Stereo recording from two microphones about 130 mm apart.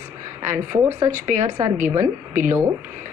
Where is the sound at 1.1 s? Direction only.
80° right.